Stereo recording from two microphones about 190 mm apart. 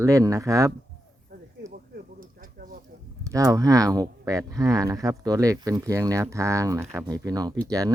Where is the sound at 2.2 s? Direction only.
45° right (ahead or behind).